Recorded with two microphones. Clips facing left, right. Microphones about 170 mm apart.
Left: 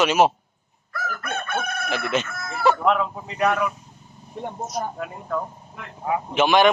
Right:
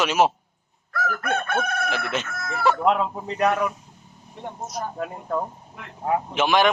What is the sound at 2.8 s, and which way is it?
Speech, 25° right (ahead or behind).